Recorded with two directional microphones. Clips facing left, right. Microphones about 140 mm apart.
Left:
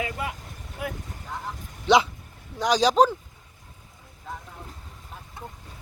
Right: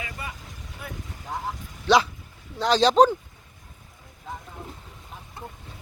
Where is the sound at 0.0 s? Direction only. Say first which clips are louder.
Left 6 dB; 75° left (ahead or behind).